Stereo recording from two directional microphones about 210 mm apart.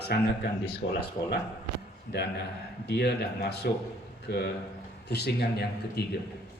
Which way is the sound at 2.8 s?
50° left (ahead or behind).